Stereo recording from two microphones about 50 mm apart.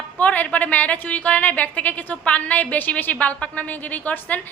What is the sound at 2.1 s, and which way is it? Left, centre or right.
Speech, left.